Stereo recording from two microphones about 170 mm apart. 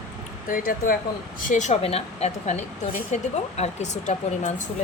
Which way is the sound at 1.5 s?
45° left (ahead or behind).